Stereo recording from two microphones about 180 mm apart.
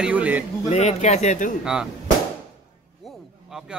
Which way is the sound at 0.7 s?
40° left (ahead or behind).